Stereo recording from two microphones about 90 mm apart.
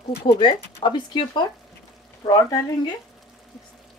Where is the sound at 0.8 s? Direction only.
60° left (ahead or behind).